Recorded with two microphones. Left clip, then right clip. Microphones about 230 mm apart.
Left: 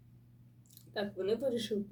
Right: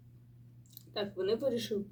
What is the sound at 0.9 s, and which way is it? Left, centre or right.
Speech, centre.